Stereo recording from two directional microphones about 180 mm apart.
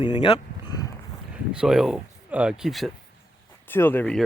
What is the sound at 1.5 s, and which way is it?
Speech, 5° right (ahead or behind).